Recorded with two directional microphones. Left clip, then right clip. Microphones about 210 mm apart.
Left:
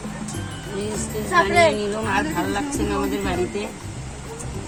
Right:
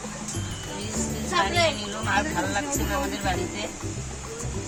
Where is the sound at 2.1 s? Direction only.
10° right (ahead or behind).